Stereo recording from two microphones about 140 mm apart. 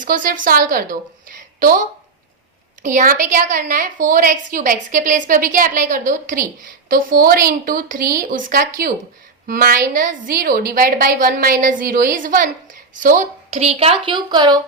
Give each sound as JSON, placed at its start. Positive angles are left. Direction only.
{"t": 0.0, "sound": "a woman's voice", "side_deg": -75}
{"t": 2.8, "sound": "a woman's voice", "side_deg": -70}
{"t": 13.5, "sound": "a woman's voice", "side_deg": -50}